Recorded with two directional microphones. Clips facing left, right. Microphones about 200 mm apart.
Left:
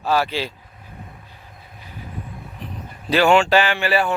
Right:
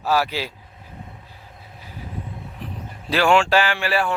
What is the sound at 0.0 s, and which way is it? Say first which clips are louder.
Speech: left 1 dB; 5° right (ahead or behind).